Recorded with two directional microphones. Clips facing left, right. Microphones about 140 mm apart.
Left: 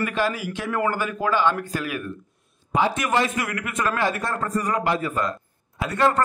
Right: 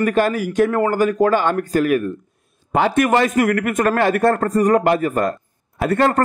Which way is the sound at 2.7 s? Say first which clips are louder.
Right 6 dB; 55° right (ahead or behind).